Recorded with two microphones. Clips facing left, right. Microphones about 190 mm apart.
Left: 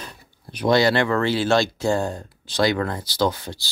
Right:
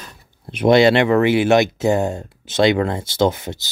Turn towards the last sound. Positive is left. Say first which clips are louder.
# right 5 dB
turn(degrees=-20)  # may be behind; listen again after turning